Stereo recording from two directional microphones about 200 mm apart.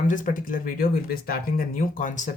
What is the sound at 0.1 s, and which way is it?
Speech, 40° left (ahead or behind).